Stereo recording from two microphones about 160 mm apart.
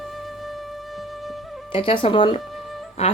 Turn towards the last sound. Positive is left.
turn(degrees=40)  # may be behind; listen again after turning